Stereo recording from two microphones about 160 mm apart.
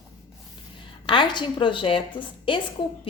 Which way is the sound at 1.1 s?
30° left (ahead or behind).